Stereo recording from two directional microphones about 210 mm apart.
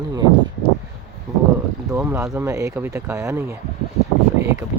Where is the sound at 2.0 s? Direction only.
5° right (ahead or behind).